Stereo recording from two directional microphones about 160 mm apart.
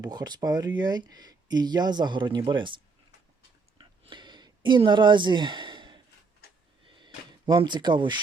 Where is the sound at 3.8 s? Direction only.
30° right (ahead or behind).